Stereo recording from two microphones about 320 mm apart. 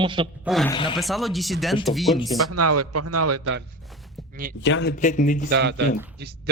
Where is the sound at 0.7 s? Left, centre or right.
Centre.